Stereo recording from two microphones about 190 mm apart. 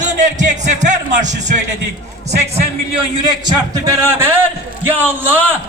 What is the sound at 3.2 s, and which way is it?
A man's voice, 20° right (ahead or behind).